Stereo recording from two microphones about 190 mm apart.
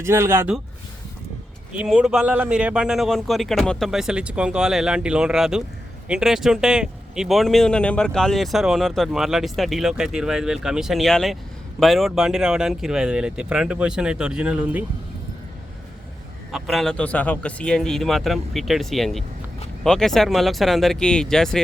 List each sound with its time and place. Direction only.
0.0 s speech: 15° right (ahead or behind)
1.7 s speech: 5° right (ahead or behind)
16.5 s speech: centre (ahead or behind)